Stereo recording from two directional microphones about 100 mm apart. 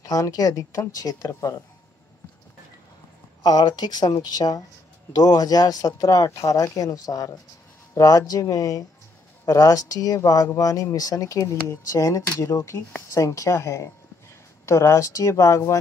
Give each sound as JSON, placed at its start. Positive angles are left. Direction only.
{"t": 0.0, "sound": "speech", "side_deg": 35}
{"t": 3.4, "sound": "speech", "side_deg": 45}